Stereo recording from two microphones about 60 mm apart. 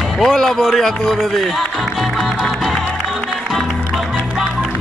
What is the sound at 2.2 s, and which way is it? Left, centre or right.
Music, centre.